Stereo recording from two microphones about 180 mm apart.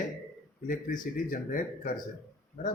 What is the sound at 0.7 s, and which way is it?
Speech, 50° left (ahead or behind).